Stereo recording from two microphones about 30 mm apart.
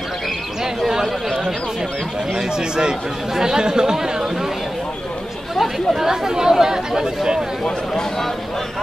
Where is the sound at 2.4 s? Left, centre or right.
Right.